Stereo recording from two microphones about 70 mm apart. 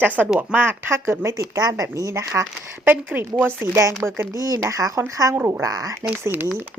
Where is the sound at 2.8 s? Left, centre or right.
Right.